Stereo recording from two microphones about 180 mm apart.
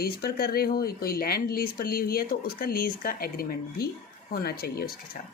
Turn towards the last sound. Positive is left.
turn(degrees=60)  # may be behind; listen again after turning